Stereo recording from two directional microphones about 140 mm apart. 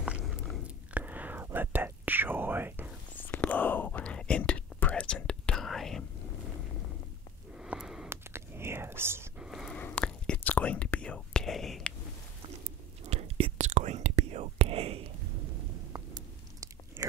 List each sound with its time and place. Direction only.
0.9 s whispering: 10° right (ahead or behind)
3.2 s whispering: 15° left (ahead or behind)
7.5 s a sound: 5° right (ahead or behind)
8.1 s whispering: 20° right (ahead or behind)
9.4 s a sound: centre (ahead or behind)
9.8 s whispering: 10° left (ahead or behind)
13.1 s whispering: 50° right (ahead or behind)
13.7 s whispering: 60° right (ahead or behind)
15.9 s chewing: 25° right (ahead or behind)